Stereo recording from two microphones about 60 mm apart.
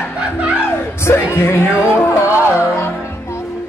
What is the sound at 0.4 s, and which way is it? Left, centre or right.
Chuckle, right.